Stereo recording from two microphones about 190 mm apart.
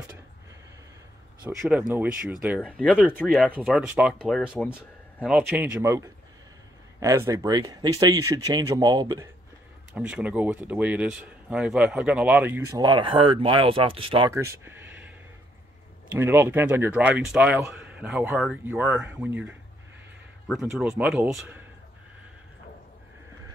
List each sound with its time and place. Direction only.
1.6 s speech: 5° right (ahead or behind)
3.4 s a man's voice: 5° right (ahead or behind)
9.9 s a man's voice: 5° right (ahead or behind); by 14.3 s 25° right (ahead or behind)
14.3 s a sound: 15° right (ahead or behind)
16.1 s a man's voice: 10° right (ahead or behind)